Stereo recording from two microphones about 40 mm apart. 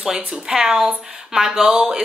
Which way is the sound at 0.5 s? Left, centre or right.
Centre.